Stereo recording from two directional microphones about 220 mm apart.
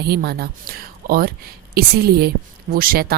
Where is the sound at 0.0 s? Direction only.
45° right (ahead or behind).